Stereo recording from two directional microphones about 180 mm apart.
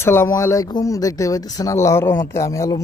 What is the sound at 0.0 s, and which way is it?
A man's voice, 15° left (ahead or behind).